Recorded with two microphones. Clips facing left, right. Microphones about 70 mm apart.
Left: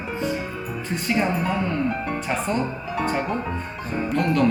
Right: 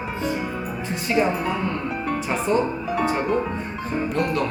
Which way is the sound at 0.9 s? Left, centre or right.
Centre.